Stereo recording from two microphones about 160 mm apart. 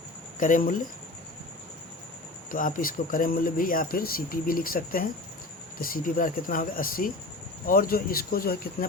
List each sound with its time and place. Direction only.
0.3 s speech: 55° left (ahead or behind)
2.5 s speech: 60° left (ahead or behind)